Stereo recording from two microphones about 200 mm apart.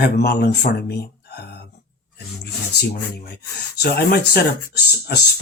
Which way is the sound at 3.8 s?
50° left (ahead or behind).